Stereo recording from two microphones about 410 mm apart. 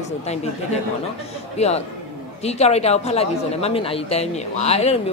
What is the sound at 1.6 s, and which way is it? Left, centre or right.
A woman's voice, centre.